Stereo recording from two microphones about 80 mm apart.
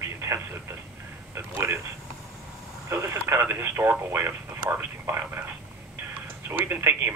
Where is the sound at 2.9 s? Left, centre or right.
Right.